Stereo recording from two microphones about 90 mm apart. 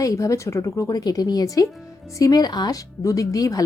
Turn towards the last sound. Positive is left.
turn(degrees=40)  # may be behind; listen again after turning